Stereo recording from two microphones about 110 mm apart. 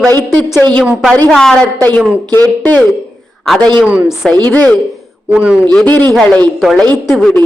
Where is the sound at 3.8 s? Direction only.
15° right (ahead or behind).